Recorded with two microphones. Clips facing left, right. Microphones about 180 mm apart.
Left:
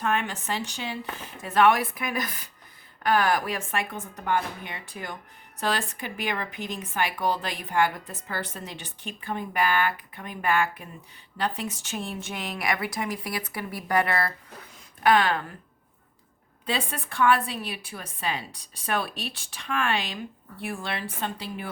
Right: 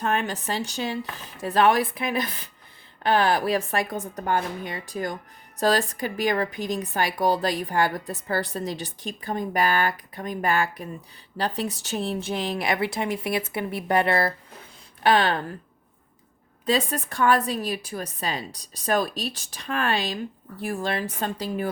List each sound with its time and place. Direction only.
0.0 s speech: 30° right (ahead or behind)
16.6 s speech: 40° right (ahead or behind)